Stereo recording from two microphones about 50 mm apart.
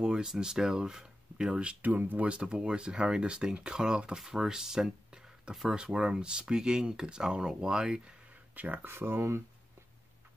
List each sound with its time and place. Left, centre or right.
0.0 s speech: centre
1.8 s speech: right; by 8.0 s centre
8.5 s speech: right
8.8 s speech: right